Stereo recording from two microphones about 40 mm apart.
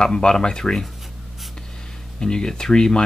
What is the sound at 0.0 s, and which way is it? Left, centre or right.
Speech, left.